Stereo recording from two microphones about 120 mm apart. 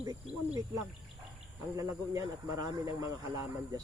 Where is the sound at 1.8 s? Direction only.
25° right (ahead or behind).